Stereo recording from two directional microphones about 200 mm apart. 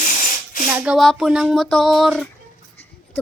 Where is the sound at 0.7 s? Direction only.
5° right (ahead or behind).